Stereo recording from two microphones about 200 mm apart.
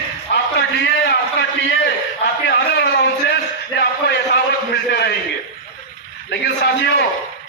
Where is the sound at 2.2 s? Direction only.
55° left (ahead or behind).